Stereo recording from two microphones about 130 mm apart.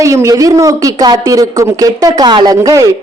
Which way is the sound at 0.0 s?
25° right (ahead or behind).